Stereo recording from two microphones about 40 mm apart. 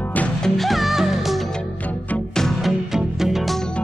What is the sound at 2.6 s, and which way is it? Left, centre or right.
Music, centre.